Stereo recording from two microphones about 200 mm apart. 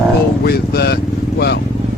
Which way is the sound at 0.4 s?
55° left (ahead or behind).